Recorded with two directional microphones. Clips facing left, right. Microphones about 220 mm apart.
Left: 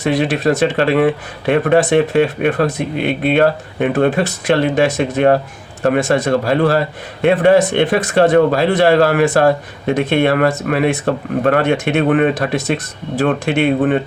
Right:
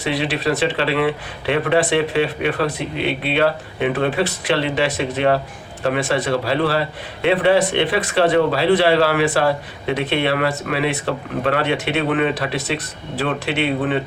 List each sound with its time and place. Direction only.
0.0 s a man's voice: 45° left (ahead or behind)